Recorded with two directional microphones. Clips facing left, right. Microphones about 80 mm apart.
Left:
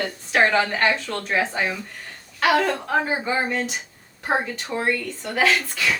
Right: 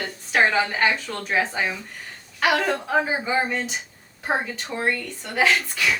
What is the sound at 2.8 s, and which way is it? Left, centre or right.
A woman's voice, centre.